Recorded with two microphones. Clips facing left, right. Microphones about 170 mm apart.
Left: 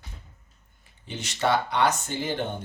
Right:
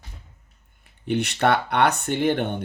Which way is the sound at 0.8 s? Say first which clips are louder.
Right 13 dB; 60° right (ahead or behind).